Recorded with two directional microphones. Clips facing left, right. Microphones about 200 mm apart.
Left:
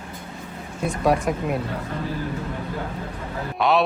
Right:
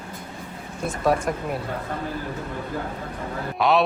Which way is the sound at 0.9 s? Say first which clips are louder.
Left 1 dB; centre (ahead or behind).